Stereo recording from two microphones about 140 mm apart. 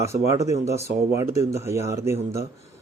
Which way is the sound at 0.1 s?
20° right (ahead or behind).